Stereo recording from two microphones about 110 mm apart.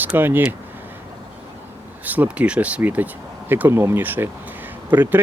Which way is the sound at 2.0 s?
15° right (ahead or behind).